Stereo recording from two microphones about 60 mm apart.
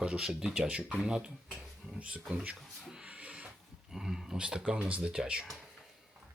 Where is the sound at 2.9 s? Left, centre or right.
Centre.